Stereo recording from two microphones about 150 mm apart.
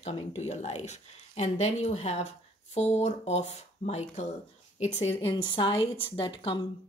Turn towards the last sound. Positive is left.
turn(degrees=35)  # may be behind; listen again after turning